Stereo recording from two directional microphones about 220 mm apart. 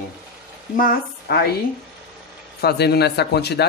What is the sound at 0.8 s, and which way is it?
Speech, 45° left (ahead or behind).